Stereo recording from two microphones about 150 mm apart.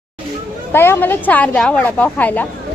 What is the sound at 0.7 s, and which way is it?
A woman's voice, 15° left (ahead or behind).